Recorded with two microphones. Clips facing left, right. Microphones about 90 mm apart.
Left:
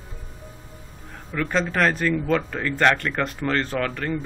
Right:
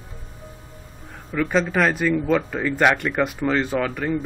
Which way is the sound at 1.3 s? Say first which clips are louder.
Right 3 dB; 5° right (ahead or behind).